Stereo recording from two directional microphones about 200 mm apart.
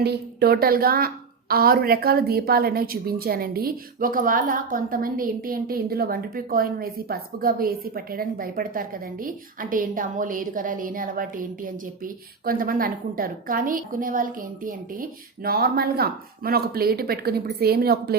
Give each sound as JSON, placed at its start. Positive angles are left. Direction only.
{"t": 0.0, "sound": "a woman's voice", "side_deg": -55}